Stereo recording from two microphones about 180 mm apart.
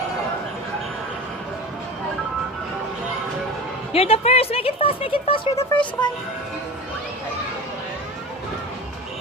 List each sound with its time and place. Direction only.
3.9 s speech: 35° left (ahead or behind)